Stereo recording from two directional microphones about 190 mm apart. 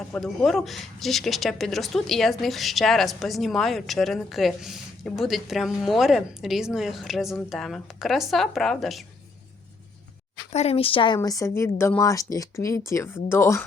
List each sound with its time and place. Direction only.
0.0 s speech: 5° left (ahead or behind)
10.5 s speech: 35° left (ahead or behind); by 13.7 s 15° left (ahead or behind)